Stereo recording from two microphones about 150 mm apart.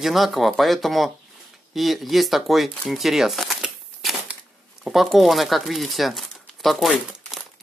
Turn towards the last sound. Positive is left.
turn(degrees=0)  # may be behind; listen again after turning